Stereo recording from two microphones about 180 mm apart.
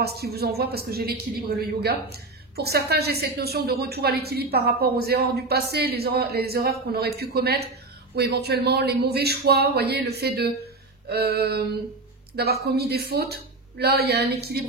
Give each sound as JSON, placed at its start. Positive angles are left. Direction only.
{"t": 0.0, "sound": "a woman's voice", "side_deg": -60}